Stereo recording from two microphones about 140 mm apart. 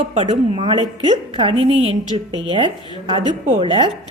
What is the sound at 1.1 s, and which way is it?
A woman's voice, 35° right (ahead or behind).